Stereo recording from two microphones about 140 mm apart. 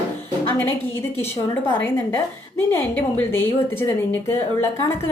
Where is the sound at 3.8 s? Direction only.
15° left (ahead or behind).